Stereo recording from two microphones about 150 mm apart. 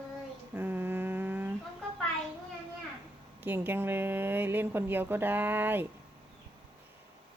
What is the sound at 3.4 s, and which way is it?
Speech, 15° right (ahead or behind).